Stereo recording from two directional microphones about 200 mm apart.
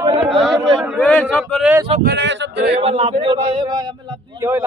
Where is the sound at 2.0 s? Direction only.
65° right (ahead or behind).